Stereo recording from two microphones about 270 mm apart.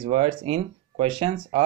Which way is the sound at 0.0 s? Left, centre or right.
Centre.